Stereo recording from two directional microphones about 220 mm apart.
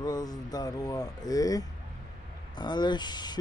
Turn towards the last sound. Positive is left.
turn(degrees=20)  # may be behind; listen again after turning